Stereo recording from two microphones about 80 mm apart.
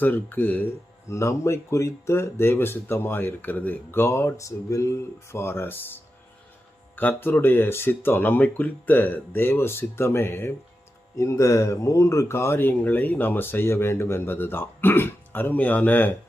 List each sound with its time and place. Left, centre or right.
0.0 s speech: left
1.1 s speech: left
6.9 s speech: left